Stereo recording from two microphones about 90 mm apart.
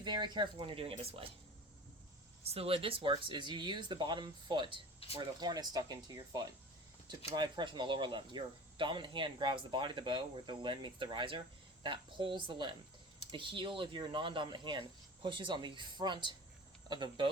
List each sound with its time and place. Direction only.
0.0 s speech: 55° right (ahead or behind); by 1.3 s 90° right
2.4 s speech: 90° right; by 4.8 s 60° right (ahead or behind)
5.0 s speech: 90° left
5.4 s speech: 50° right (ahead or behind)